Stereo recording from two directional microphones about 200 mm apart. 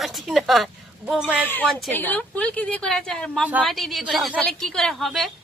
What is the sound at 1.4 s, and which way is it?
A woman's voice, 10° left (ahead or behind).